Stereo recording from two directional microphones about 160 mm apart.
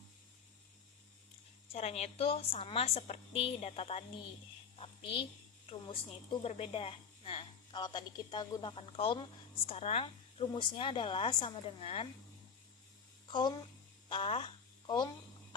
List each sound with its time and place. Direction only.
1.7 s a woman's voice: 40° left (ahead or behind)
14.1 s speech: 35° left (ahead or behind)